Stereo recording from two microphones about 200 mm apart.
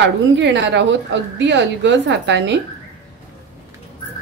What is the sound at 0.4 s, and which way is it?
A woman's voice, 60° right (ahead or behind).